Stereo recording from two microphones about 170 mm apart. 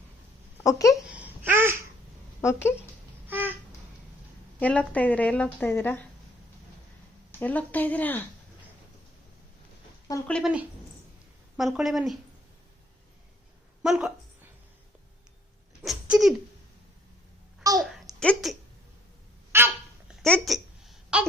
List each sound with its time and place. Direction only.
0.6 s speech: 20° left (ahead or behind)
1.1 s babbling: 10° right (ahead or behind)
2.4 s a woman's voice: 15° left (ahead or behind)
3.2 s a sound: 10° right (ahead or behind)
4.6 s a woman's voice: 10° left (ahead or behind)
7.3 s a woman's voice: 10° left (ahead or behind)
10.2 s a woman's voice: 5° left (ahead or behind)
11.5 s a woman's voice: centre (ahead or behind)
13.8 s a woman's voice: 5° right (ahead or behind)
15.8 s a sound: centre (ahead or behind)
17.7 s a sound: centre (ahead or behind)
19.5 s dog: 15° right (ahead or behind)
20.2 s a sound: 5° left (ahead or behind)